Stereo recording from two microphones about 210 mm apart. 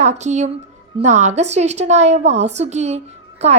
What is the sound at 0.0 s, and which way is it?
A woman's voice, 35° right (ahead or behind).